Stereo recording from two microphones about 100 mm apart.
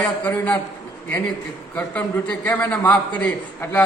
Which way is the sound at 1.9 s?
15° left (ahead or behind).